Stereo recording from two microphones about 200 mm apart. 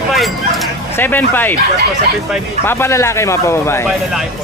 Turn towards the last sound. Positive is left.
turn(degrees=15)  # may be behind; listen again after turning